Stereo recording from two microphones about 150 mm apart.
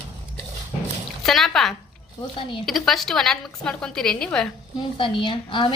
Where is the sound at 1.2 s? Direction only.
Centre (ahead or behind).